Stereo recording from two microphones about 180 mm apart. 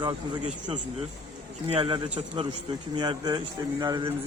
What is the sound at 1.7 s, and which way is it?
Speech, 30° right (ahead or behind).